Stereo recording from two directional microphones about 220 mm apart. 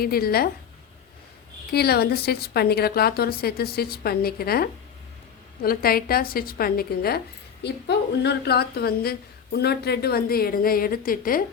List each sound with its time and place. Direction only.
0.0 s a woman's voice: 45° left (ahead or behind)
1.7 s a woman's voice: 45° left (ahead or behind)